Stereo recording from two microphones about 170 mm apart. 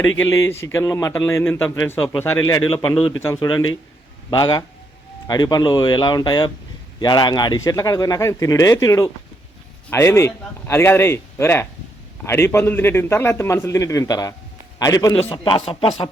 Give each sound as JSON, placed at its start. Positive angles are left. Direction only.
{"t": 0.2, "sound": "a man's voice", "side_deg": 15}